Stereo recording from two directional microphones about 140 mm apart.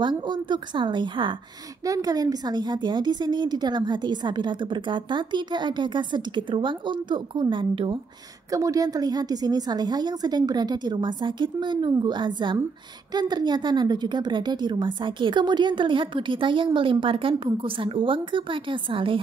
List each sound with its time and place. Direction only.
0.0 s a woman's voice: 35° right (ahead or behind)
8.5 s a woman's voice: 25° right (ahead or behind); by 19.2 s 40° right (ahead or behind)